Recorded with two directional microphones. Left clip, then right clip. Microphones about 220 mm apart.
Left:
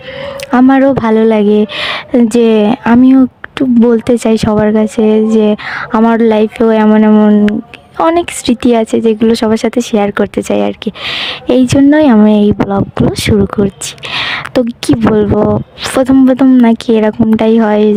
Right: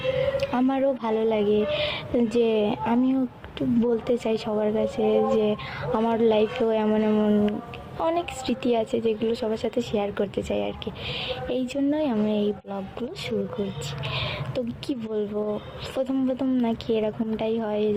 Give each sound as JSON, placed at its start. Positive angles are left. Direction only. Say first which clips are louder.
{"t": 0.5, "sound": "a woman's voice", "louder": "left 16 dB", "side_deg": 45}
{"t": 14.1, "sound": "a woman's voice", "louder": "left 18 dB", "side_deg": 50}